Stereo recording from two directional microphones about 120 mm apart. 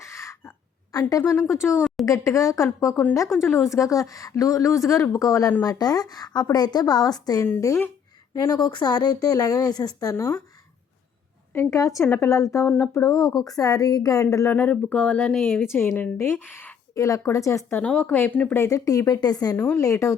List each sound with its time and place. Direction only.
0.0 s a sound: 25° left (ahead or behind)
1.2 s a woman's voice: 20° left (ahead or behind)
1.5 s speech: 5° right (ahead or behind)
2.0 s a woman's voice: 25° left (ahead or behind)
11.5 s a woman's voice: 25° left (ahead or behind)
14.5 s speech: 15° left (ahead or behind)
15.6 s a woman's voice: 20° left (ahead or behind)
16.9 s a woman's voice: 25° left (ahead or behind)
17.7 s a woman's voice: 10° left (ahead or behind); by 19.5 s 35° left (ahead or behind)
19.5 s speech: 15° left (ahead or behind)
19.8 s a woman's voice: 25° left (ahead or behind)